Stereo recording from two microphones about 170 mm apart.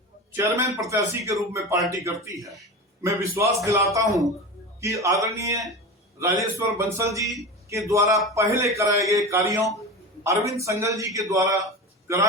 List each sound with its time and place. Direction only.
0.3 s a man's voice: 15° right (ahead or behind)
6.7 s a man's voice: 15° right (ahead or behind)